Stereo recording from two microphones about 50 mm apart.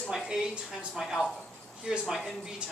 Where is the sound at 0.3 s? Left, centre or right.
Centre.